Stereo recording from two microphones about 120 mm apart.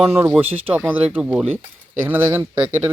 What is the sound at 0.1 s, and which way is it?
Speech, 15° right (ahead or behind).